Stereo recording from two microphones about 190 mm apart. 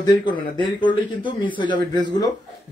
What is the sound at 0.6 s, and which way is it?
Speech, 25° left (ahead or behind).